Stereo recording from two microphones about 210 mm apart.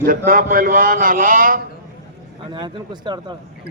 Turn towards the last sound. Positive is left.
turn(degrees=-20)  # may be behind; listen again after turning